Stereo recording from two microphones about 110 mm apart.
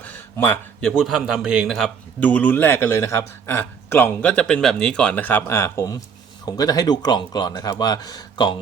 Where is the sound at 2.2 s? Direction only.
15° left (ahead or behind).